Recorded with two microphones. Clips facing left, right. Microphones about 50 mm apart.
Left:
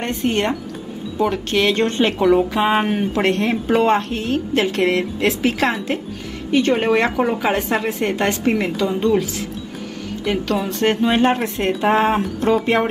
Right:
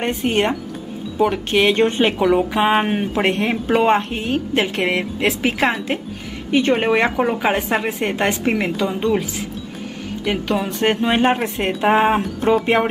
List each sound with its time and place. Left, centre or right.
0.0 s a woman's voice: centre
10.2 s a woman's voice: centre